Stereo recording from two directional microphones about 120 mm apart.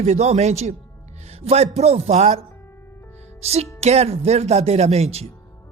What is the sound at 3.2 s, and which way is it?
Music, 65° right (ahead or behind).